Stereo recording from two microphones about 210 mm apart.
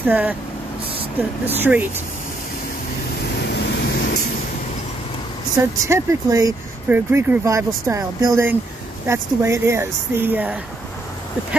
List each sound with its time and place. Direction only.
0.0 s speech: 10° right (ahead or behind)
1.6 s speech: 10° right (ahead or behind)
3.4 s vehicle: 50° left (ahead or behind)
5.6 s speech: 15° right (ahead or behind)